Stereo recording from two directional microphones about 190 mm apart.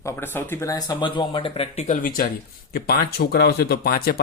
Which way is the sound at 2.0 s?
50° left (ahead or behind).